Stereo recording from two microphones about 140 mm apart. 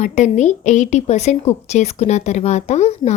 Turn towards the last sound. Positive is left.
turn(degrees=50)  # may be behind; listen again after turning